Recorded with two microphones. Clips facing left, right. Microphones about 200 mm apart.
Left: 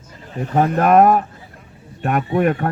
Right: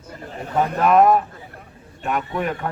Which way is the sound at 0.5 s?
50° left (ahead or behind).